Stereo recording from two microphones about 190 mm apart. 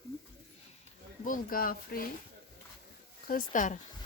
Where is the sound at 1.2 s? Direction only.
45° left (ahead or behind).